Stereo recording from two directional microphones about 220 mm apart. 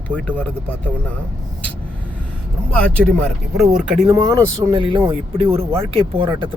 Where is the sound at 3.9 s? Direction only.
30° right (ahead or behind).